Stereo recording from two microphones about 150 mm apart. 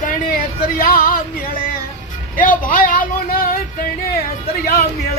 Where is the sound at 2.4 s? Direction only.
65° left (ahead or behind).